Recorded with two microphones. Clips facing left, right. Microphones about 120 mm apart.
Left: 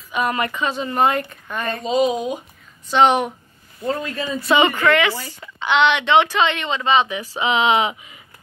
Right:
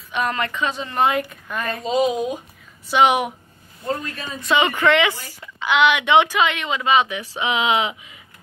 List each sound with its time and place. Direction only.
0.1 s a woman's voice: 5° left (ahead or behind); by 3.3 s 10° right (ahead or behind)
4.5 s a woman's voice: centre (ahead or behind)
4.7 s a woman's voice: 20° right (ahead or behind)
5.4 s a woman's voice: 5° right (ahead or behind)